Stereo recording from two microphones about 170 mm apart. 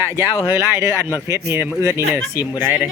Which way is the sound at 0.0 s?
15° right (ahead or behind).